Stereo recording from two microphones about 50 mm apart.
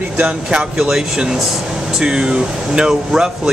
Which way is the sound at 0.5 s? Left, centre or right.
Centre.